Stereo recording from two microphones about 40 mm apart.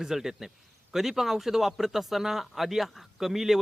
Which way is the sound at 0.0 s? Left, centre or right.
Centre.